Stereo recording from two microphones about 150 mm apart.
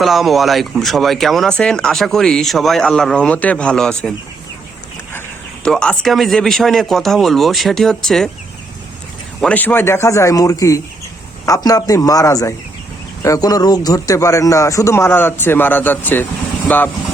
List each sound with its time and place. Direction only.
0.0 s speech: centre (ahead or behind)
5.6 s speech: 5° left (ahead or behind)
9.4 s speech: 10° left (ahead or behind)